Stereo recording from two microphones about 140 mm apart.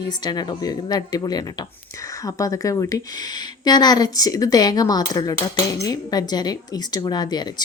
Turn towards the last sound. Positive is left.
turn(degrees=30)  # may be behind; listen again after turning